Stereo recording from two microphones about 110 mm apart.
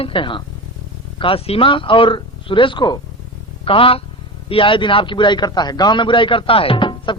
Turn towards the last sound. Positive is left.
turn(degrees=50)  # may be behind; listen again after turning